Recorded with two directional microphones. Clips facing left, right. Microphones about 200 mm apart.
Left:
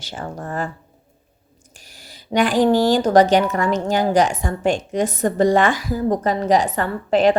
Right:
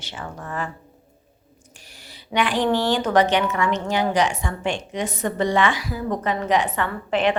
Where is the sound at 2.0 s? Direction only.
40° left (ahead or behind).